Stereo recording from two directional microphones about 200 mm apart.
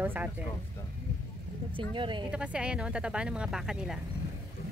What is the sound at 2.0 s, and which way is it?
Speech, 25° right (ahead or behind).